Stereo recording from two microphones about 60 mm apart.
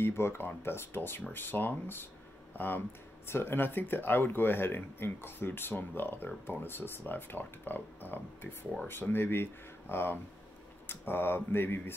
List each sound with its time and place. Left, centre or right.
0.0 s speech: left